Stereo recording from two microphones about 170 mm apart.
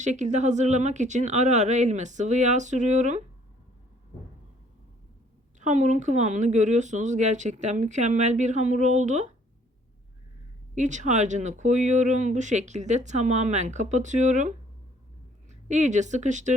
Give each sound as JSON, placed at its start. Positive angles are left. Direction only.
{"t": 0.0, "sound": "speech", "side_deg": -45}
{"t": 5.5, "sound": "speech", "side_deg": -45}
{"t": 10.8, "sound": "speech", "side_deg": -45}